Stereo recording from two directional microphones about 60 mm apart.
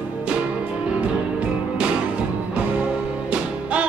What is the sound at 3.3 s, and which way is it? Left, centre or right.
Music, right.